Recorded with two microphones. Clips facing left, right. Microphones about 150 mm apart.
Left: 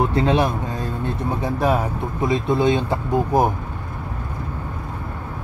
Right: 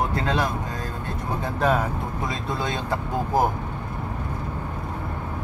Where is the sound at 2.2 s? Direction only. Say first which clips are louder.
Left 12 dB; 20° left (ahead or behind).